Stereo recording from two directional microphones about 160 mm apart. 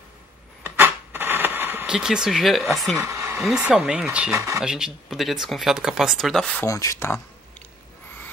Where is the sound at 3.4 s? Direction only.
5° right (ahead or behind).